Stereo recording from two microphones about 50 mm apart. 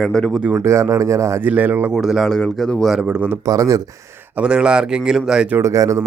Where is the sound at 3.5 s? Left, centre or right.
Right.